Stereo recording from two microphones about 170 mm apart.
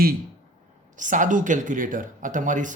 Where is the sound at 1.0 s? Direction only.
50° right (ahead or behind).